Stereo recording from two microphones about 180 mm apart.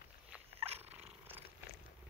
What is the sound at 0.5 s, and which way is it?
Dog, 35° right (ahead or behind).